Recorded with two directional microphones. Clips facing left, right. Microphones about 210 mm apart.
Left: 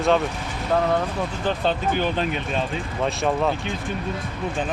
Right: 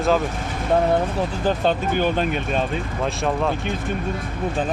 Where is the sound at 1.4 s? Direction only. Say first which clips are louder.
Right 2 dB; 45° right (ahead or behind).